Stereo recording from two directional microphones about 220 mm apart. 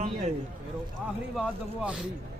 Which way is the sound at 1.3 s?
5° right (ahead or behind).